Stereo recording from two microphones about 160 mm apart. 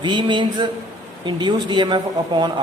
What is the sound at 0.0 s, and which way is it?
Speech, 30° right (ahead or behind).